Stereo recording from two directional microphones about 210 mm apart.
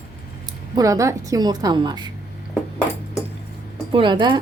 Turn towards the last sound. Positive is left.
turn(degrees=-20)  # may be behind; listen again after turning